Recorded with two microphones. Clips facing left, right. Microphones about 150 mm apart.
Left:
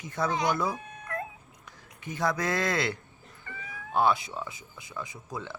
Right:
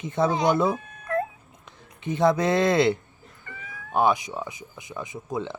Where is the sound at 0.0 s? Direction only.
25° right (ahead or behind).